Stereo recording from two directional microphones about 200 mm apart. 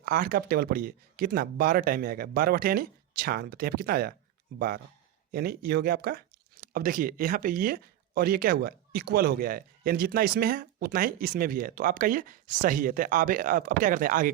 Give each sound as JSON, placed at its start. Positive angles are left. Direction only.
{"t": 0.0, "sound": "speech", "side_deg": -45}
{"t": 5.3, "sound": "speech", "side_deg": -50}